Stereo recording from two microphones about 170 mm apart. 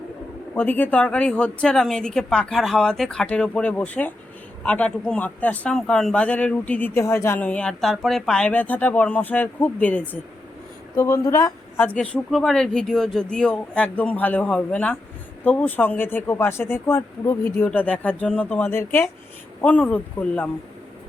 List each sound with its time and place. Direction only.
0.5 s a man's voice: 10° left (ahead or behind)
11.8 s a man's voice: 5° left (ahead or behind)